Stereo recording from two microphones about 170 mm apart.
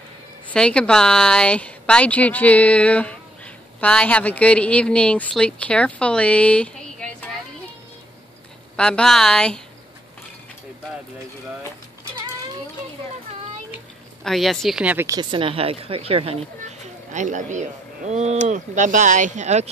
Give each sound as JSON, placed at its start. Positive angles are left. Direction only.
{"t": 0.5, "sound": "speech", "side_deg": 5}
{"t": 8.7, "sound": "speech", "side_deg": 5}
{"t": 14.2, "sound": "speech", "side_deg": 0}
{"t": 15.1, "sound": "speech", "side_deg": -30}